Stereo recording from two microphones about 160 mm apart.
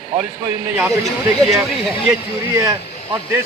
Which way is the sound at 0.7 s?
15° right (ahead or behind).